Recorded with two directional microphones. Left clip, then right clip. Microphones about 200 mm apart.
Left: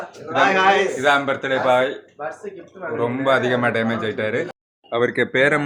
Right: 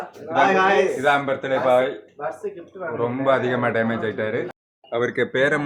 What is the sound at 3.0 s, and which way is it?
Speech, 5° left (ahead or behind).